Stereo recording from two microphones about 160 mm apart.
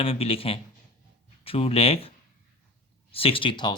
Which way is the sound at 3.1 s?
35° left (ahead or behind).